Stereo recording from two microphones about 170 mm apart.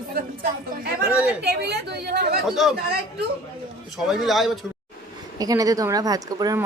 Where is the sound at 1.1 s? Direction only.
5° right (ahead or behind).